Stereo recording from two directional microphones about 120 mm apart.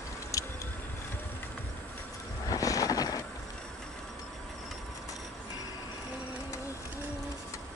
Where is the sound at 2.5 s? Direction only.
30° left (ahead or behind).